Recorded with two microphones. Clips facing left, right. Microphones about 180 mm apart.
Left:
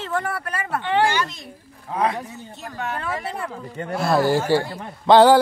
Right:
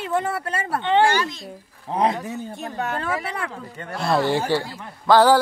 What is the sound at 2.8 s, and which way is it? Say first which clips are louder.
Speech: right 1 dB; 40° right (ahead or behind).